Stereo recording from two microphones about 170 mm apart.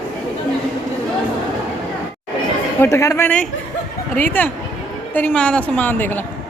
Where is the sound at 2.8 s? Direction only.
15° left (ahead or behind).